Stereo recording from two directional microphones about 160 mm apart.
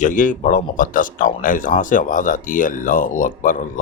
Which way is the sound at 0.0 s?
55° left (ahead or behind).